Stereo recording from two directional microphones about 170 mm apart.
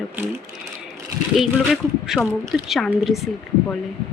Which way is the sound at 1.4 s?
Centre (ahead or behind).